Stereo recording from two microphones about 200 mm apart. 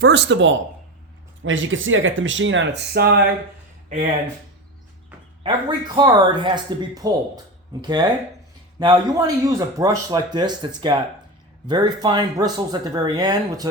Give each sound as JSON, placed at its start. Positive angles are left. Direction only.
{"t": 0.0, "sound": "speech", "side_deg": -60}
{"t": 1.4, "sound": "speech", "side_deg": -75}
{"t": 5.4, "sound": "speech", "side_deg": -25}